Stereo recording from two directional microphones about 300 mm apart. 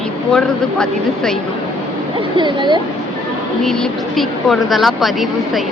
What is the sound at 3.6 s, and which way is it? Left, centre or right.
Speech, centre.